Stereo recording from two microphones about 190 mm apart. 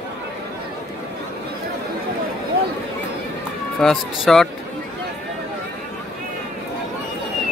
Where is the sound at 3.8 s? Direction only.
Centre (ahead or behind).